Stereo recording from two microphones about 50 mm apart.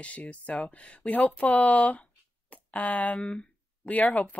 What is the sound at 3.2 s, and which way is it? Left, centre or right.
Speech, left.